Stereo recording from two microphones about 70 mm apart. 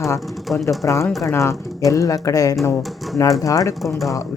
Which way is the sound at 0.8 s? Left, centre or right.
Left.